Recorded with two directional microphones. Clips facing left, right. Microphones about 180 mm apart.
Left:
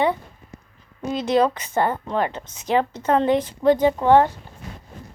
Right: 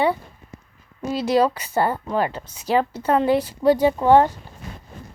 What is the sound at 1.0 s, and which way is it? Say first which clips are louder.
A woman's voice: even; 10° right (ahead or behind).